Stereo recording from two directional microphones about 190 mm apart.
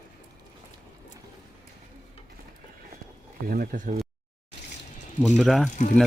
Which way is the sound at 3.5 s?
50° right (ahead or behind).